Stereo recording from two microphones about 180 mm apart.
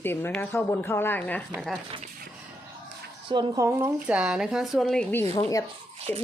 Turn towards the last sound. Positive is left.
turn(degrees=5)  # may be behind; listen again after turning